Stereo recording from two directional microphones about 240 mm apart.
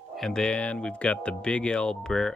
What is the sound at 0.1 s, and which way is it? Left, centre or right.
Speech, centre.